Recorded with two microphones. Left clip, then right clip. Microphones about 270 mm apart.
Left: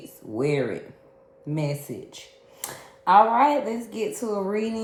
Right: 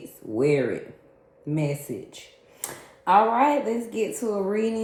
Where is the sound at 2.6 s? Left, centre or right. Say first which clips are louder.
Left 1 dB; left.